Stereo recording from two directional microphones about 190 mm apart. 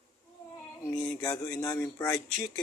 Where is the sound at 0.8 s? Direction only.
5° left (ahead or behind).